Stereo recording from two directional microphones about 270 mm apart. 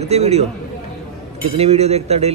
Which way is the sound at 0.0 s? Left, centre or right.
Right.